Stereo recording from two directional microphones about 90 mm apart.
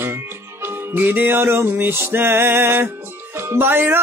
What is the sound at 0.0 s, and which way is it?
Music, 25° right (ahead or behind).